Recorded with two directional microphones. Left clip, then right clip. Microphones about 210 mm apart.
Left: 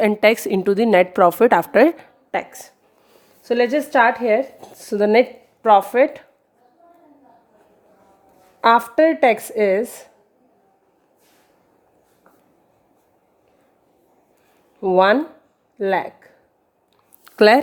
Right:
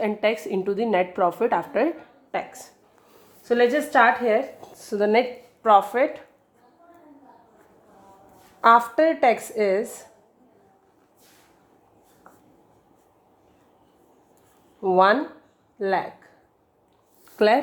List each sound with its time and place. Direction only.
0.0 s a woman's voice: 45° left (ahead or behind)
8.6 s a woman's voice: 45° left (ahead or behind)
14.8 s a woman's voice: 45° left (ahead or behind)
17.3 s speech: 45° left (ahead or behind)